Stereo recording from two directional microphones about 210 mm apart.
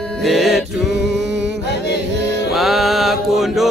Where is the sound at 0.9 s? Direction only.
55° right (ahead or behind).